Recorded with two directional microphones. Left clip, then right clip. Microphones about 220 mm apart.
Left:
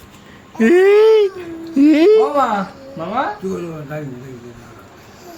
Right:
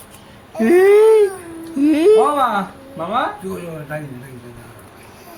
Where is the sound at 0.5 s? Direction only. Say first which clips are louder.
Even; 15° left (ahead or behind).